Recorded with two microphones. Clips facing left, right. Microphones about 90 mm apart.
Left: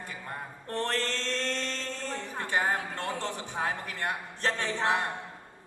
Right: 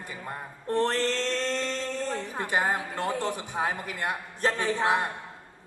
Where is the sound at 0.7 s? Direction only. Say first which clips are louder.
Right 6 dB; 20° right (ahead or behind).